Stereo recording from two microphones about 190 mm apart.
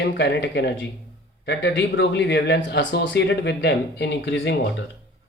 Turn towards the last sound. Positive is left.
turn(degrees=80)